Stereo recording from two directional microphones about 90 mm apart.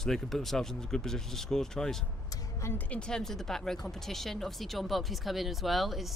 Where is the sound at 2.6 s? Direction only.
30° left (ahead or behind).